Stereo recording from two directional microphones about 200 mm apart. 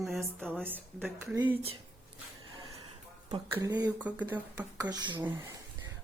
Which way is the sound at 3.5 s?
20° right (ahead or behind).